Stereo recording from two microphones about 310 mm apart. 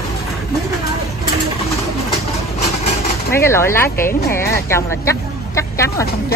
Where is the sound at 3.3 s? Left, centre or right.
Centre.